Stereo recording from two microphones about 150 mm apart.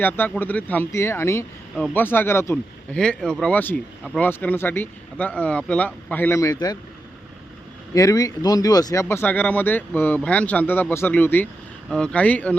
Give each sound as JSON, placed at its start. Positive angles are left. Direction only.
{"t": 0.0, "sound": "speech", "side_deg": 10}
{"t": 3.0, "sound": "speech", "side_deg": 5}
{"t": 7.9, "sound": "speech", "side_deg": 25}